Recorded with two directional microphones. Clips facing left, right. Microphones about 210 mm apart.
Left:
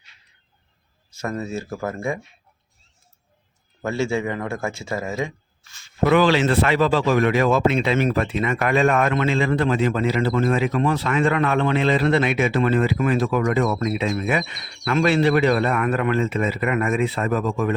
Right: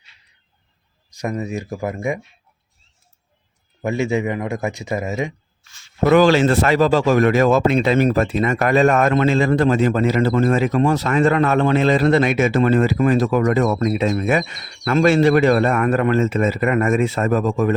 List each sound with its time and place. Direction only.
1.1 s speech: 15° right (ahead or behind)
3.8 s speech: 15° right (ahead or behind)
6.1 s speech: 45° right (ahead or behind)